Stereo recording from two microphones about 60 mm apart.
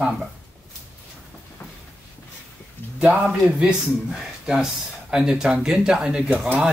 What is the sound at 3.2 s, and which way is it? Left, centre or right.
A man's voice, centre.